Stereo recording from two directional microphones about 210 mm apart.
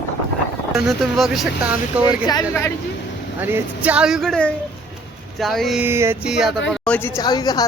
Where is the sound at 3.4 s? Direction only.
10° right (ahead or behind).